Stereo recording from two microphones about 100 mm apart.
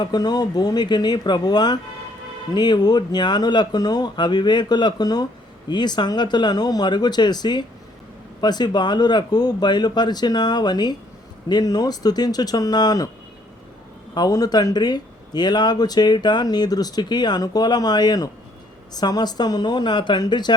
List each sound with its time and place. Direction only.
0.0 s speech: 45° left (ahead or behind)
14.1 s speech: 40° left (ahead or behind)